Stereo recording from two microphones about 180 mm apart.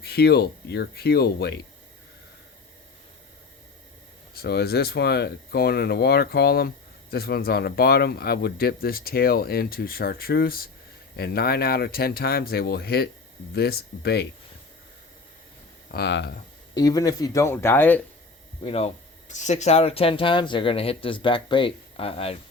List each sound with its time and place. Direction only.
0.0 s speech: 60° left (ahead or behind)
4.4 s speech: 60° left (ahead or behind)
15.9 s speech: 70° left (ahead or behind)
16.7 s speech: 20° left (ahead or behind)
18.6 s speech: 35° left (ahead or behind)